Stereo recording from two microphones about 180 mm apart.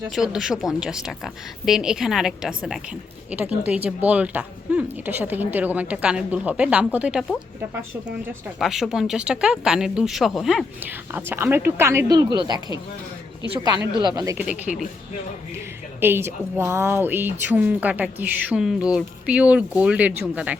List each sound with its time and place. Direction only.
0.1 s a woman's voice: centre (ahead or behind)
8.5 s speech: centre (ahead or behind); by 14.3 s 25° right (ahead or behind)
14.3 s a woman's voice: 10° right (ahead or behind)